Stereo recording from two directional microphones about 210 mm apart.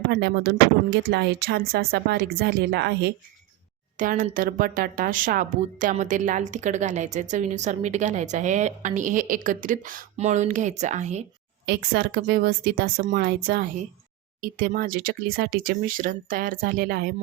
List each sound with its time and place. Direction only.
0.1 s speech: 50° right (ahead or behind)
3.9 s a woman's voice: 40° right (ahead or behind)
11.6 s speech: 50° right (ahead or behind)